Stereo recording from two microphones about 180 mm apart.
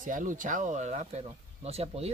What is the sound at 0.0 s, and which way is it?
Speech, 45° right (ahead or behind).